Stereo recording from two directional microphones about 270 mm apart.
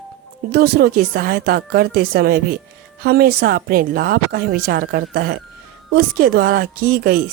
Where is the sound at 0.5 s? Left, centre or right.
Right.